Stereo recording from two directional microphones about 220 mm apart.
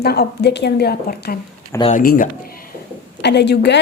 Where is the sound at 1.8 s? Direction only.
35° left (ahead or behind).